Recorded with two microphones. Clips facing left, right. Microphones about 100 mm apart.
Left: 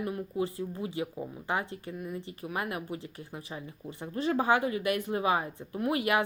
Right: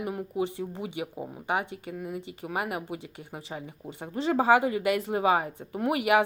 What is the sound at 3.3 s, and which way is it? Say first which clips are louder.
Speech: right 4 dB; 25° right (ahead or behind).